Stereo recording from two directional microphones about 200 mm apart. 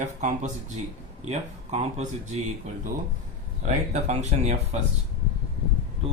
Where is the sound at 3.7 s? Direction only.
35° right (ahead or behind).